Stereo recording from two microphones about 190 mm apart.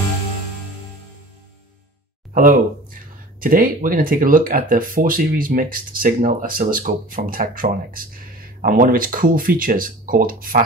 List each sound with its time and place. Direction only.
2.3 s speech: 45° right (ahead or behind)